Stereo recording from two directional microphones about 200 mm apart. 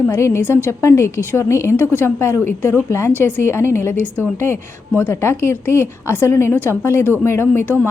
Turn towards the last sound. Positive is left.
turn(degrees=10)  # may be behind; listen again after turning